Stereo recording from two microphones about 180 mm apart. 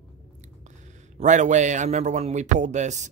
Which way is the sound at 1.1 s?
40° right (ahead or behind).